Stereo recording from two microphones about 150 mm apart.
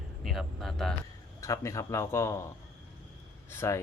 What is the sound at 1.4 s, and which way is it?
Speech, 20° left (ahead or behind).